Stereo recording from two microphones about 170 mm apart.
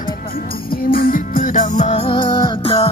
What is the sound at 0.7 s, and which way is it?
Music, 55° left (ahead or behind).